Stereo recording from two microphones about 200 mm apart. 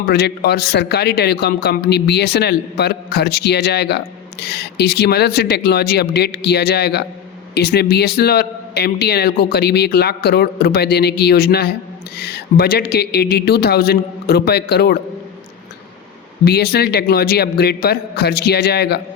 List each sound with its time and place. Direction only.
0.0 s speech: 55° left (ahead or behind)
16.4 s speech: 55° left (ahead or behind)